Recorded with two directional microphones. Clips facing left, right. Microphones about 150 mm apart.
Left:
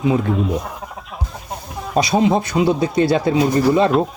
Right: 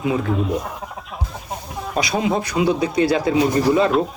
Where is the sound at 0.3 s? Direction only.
Centre (ahead or behind).